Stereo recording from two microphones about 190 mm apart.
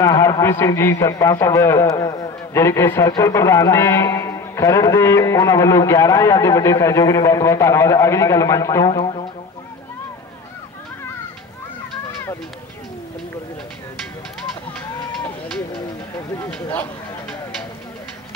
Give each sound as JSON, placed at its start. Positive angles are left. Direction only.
{"t": 0.0, "sound": "a man's voice", "side_deg": 20}
{"t": 16.4, "sound": "speech", "side_deg": 5}